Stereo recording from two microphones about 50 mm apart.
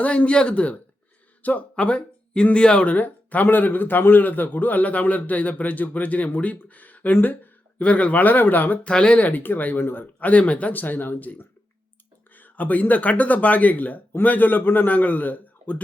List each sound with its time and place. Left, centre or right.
0.0 s speech: left
7.8 s speech: left
8.8 s speech: centre
9.1 s speech: left
12.4 s speech: left